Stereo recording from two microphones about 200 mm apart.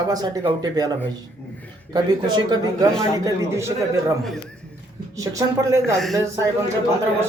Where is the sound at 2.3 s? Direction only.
20° right (ahead or behind).